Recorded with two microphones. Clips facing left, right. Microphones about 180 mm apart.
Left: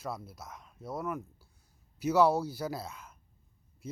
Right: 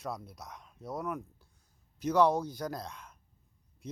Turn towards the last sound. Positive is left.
turn(degrees=5)  # may be behind; listen again after turning